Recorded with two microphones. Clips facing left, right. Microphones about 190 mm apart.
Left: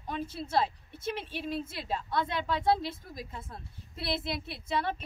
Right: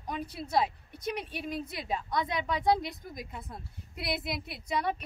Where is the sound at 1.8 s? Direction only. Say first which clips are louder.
Right 1 dB; 15° right (ahead or behind).